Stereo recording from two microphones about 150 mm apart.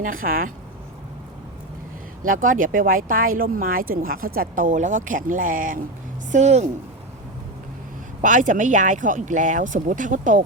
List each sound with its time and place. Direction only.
0.0 s speech: 65° right (ahead or behind)
2.2 s speech: 65° right (ahead or behind)
6.3 s speech: 50° right (ahead or behind)
8.2 s speech: 55° right (ahead or behind)